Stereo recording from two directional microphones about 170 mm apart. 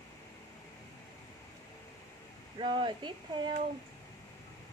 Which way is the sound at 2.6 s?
30° right (ahead or behind).